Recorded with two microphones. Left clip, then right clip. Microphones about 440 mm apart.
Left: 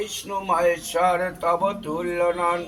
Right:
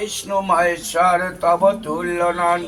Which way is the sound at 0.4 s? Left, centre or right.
Left.